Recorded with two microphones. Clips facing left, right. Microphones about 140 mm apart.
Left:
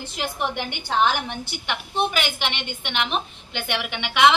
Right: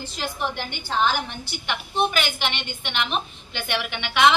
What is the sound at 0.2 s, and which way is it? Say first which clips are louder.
Speech: left 2 dB; 15° left (ahead or behind).